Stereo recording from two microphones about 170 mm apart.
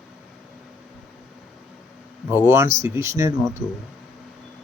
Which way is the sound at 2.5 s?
15° right (ahead or behind).